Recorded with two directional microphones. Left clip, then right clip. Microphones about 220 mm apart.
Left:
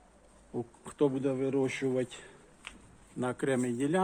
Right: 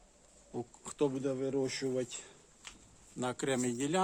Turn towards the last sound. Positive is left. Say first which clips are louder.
# left 3 dB
turn(degrees=-5)  # may be behind; listen again after turning